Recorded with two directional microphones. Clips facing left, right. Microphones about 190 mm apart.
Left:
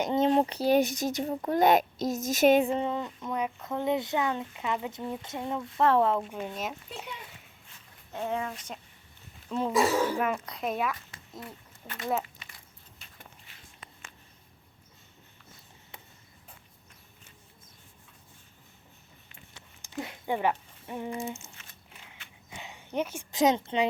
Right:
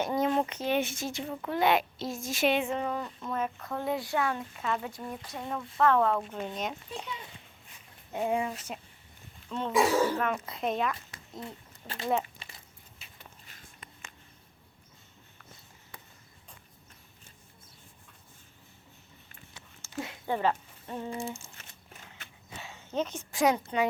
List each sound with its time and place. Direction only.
0.0 s a sound: 25° left (ahead or behind)
0.3 s a child's voice: 35° left (ahead or behind)
6.1 s a woman's voice: 10° left (ahead or behind)
8.1 s speech: 15° right (ahead or behind)
9.5 s a woman's voice: 5° left (ahead or behind)
11.3 s speech: 25° right (ahead or behind)
12.4 s a sound: 30° right (ahead or behind)
13.5 s walk: 40° right (ahead or behind)
19.8 s a sound: 15° left (ahead or behind)
20.2 s speech: 15° left (ahead or behind)
21.3 s crumpling: 35° right (ahead or behind)
22.4 s a sound: 15° left (ahead or behind)
23.4 s speech: 20° left (ahead or behind)